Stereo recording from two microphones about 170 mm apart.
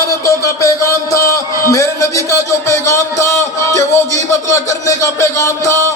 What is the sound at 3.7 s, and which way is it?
Speech, 15° left (ahead or behind).